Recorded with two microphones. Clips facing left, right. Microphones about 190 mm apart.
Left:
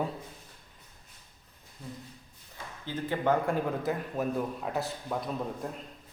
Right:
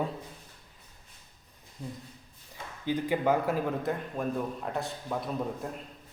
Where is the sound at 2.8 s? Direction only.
15° right (ahead or behind).